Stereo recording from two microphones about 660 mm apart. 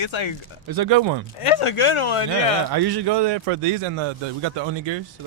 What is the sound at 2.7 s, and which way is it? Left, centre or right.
A man's voice, right.